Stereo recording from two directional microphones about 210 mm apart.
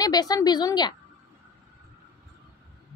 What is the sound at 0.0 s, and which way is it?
Speech, 20° left (ahead or behind).